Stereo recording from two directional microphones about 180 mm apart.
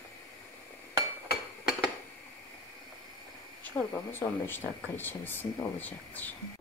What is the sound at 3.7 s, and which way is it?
Speech, 10° left (ahead or behind).